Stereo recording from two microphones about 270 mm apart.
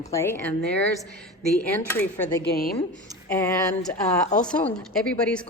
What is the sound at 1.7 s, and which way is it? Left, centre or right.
Speech, centre.